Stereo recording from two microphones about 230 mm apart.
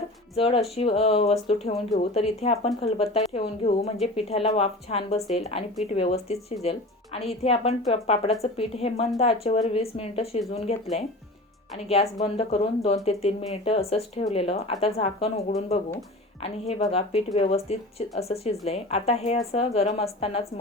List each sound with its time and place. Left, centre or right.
0.3 s speech: left
11.9 s speech: left